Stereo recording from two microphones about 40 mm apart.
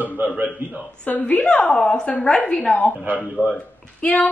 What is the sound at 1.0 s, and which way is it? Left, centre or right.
Speech, left.